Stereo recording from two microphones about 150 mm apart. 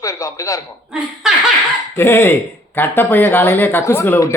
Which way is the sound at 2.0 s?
15° left (ahead or behind).